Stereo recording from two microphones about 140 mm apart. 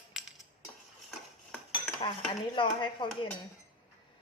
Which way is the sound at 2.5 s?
35° left (ahead or behind).